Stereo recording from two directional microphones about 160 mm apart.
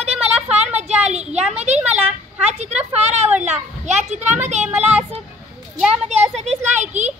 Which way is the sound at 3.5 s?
45° right (ahead or behind).